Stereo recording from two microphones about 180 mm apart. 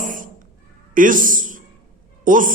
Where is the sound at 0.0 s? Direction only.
45° right (ahead or behind).